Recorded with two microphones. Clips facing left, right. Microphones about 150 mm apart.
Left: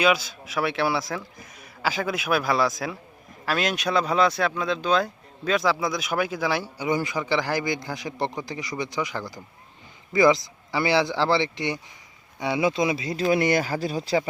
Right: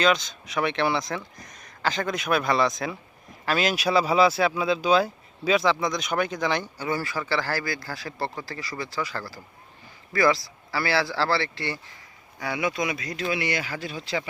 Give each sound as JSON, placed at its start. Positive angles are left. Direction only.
{"t": 0.0, "sound": "speech", "side_deg": 5}
{"t": 13.2, "sound": "speech", "side_deg": 45}